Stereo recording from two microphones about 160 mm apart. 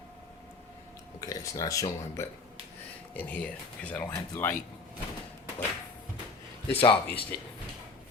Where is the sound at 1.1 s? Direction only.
20° left (ahead or behind).